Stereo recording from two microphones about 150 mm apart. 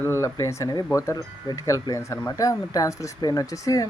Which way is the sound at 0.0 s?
20° left (ahead or behind).